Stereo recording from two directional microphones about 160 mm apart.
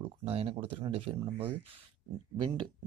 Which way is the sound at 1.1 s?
25° right (ahead or behind).